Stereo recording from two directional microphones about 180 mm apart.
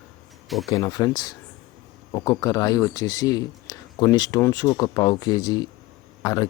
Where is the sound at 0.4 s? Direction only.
Centre (ahead or behind).